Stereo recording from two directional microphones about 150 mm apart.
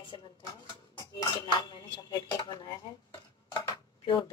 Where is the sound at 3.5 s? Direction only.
30° left (ahead or behind).